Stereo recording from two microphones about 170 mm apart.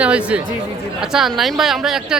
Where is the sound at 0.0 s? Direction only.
5° right (ahead or behind).